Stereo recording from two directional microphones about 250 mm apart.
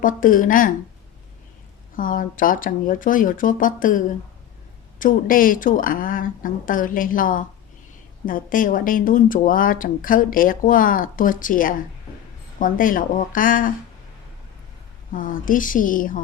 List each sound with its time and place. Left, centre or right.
0.0 s speech: left
2.0 s speech: left
15.1 s speech: left